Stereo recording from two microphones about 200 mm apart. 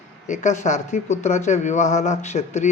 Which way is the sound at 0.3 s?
35° left (ahead or behind).